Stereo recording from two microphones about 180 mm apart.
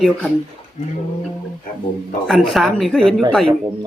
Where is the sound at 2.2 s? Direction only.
Centre (ahead or behind).